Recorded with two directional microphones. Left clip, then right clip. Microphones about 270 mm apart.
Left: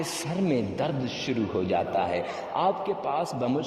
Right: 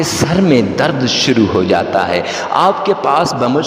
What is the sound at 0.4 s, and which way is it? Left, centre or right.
A man's voice, right.